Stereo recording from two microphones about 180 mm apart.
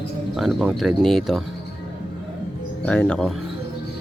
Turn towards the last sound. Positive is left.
turn(degrees=5)  # may be behind; listen again after turning